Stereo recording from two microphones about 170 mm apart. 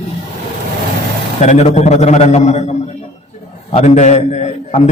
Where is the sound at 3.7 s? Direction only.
40° left (ahead or behind).